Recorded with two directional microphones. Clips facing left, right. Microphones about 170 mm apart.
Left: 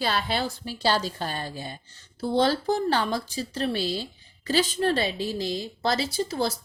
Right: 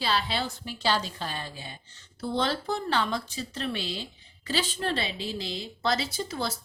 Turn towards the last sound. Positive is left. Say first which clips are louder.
# left 5 dB
turn(degrees=40)  # may be behind; listen again after turning